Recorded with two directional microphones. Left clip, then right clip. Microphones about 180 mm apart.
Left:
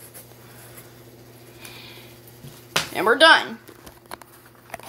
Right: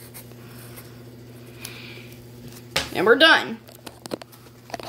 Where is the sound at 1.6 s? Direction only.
40° right (ahead or behind).